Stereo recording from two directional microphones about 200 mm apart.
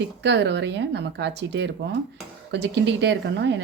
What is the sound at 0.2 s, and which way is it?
A woman's voice, 60° right (ahead or behind).